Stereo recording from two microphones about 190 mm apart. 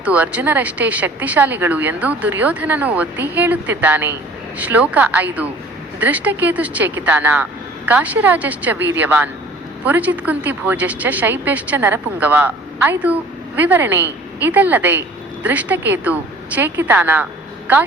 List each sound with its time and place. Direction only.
0.0 s speech: 5° right (ahead or behind)